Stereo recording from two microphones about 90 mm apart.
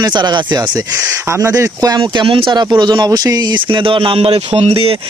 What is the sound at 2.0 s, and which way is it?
Speech, 80° right.